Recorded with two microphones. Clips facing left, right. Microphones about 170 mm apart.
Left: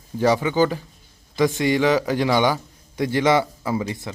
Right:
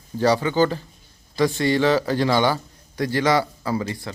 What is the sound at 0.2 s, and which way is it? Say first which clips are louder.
A man's voice: even; 15° left (ahead or behind).